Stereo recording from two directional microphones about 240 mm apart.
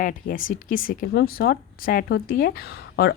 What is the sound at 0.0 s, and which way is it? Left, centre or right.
Speech, left.